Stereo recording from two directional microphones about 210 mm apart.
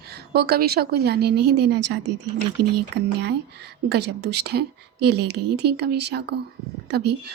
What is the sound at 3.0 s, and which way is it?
A woman's voice, 55° right (ahead or behind).